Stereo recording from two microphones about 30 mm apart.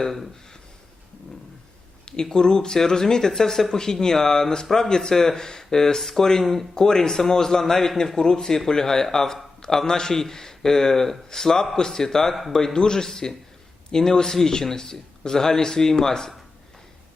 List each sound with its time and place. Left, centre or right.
0.0 s speech: centre
2.3 s speech: left
6.7 s speech: left
12.3 s speech: centre
12.5 s speech: left